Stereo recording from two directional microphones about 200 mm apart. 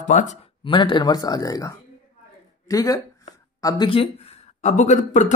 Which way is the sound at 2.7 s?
15° left (ahead or behind).